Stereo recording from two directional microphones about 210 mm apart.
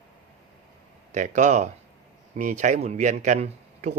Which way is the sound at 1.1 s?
35° right (ahead or behind).